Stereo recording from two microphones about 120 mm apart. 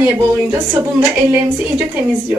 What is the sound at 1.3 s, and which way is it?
Speech, 20° right (ahead or behind).